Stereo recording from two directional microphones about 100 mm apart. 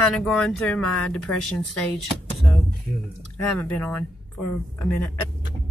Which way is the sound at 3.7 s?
15° left (ahead or behind).